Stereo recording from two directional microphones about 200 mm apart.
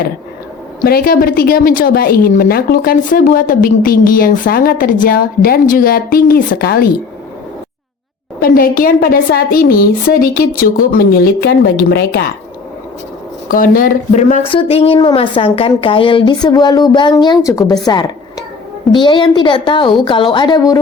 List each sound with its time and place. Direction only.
0.9 s speech: 50° left (ahead or behind)
8.4 s speech: 45° left (ahead or behind)
13.5 s speech: 45° left (ahead or behind)
14.5 s a woman's voice: 25° left (ahead or behind)
17.8 s a sound: 20° left (ahead or behind)
18.9 s a woman's voice: 25° left (ahead or behind)